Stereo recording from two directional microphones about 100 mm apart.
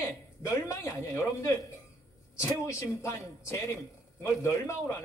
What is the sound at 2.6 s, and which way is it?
A man's voice, 30° left (ahead or behind).